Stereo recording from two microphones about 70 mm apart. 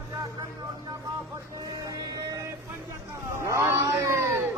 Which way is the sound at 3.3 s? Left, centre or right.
Right.